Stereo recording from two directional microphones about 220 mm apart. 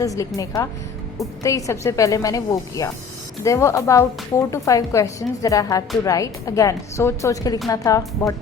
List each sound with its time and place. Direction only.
0.0 s a woman's voice: 15° left (ahead or behind)